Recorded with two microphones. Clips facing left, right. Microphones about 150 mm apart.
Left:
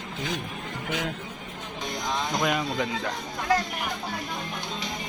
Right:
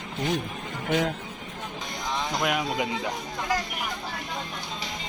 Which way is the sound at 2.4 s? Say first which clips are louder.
Even; 5° right (ahead or behind).